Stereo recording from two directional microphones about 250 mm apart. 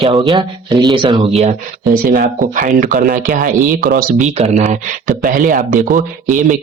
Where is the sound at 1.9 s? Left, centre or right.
Right.